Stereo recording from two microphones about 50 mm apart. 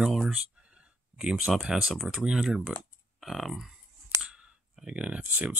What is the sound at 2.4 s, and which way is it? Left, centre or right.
Speech, centre.